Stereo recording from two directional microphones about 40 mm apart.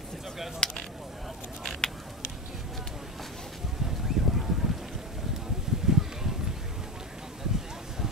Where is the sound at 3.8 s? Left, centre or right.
Centre.